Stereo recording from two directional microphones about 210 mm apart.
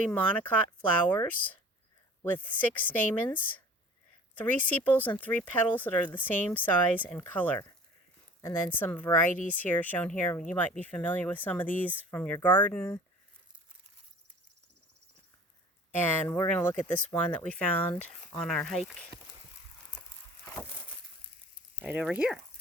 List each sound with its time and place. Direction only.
0.0 s speech: 5° left (ahead or behind)
9.3 s speech: 35° left (ahead or behind)
9.6 s speech: 10° left (ahead or behind)
15.9 s speech: 5° left (ahead or behind)
20.4 s a sound: 5° left (ahead or behind)
21.8 s speech: 5° right (ahead or behind)